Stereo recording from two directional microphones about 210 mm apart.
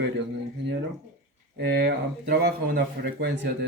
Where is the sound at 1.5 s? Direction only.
50° right (ahead or behind).